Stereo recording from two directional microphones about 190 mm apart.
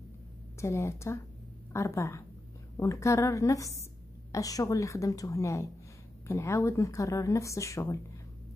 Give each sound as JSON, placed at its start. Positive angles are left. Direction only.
{"t": 0.6, "sound": "a woman's voice", "side_deg": 15}